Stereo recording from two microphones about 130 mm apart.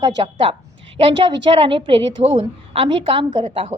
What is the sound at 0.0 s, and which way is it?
A woman's voice, 45° right (ahead or behind).